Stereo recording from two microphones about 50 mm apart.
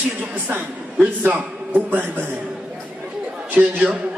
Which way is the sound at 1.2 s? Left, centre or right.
Right.